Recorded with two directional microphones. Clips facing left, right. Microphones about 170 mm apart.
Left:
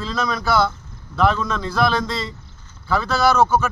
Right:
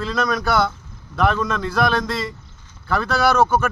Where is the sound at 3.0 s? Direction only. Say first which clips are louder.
Even; 55° right (ahead or behind).